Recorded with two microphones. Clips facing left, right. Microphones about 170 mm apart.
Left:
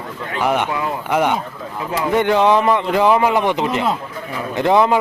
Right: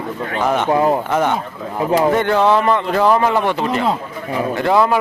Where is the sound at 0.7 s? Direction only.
35° right (ahead or behind).